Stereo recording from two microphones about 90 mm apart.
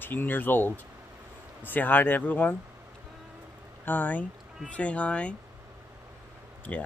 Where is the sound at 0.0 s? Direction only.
20° left (ahead or behind).